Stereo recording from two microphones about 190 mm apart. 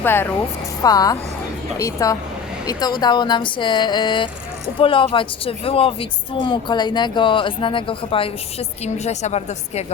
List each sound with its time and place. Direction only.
0.0 s a woman's voice: 10° left (ahead or behind); by 9.8 s 35° left (ahead or behind)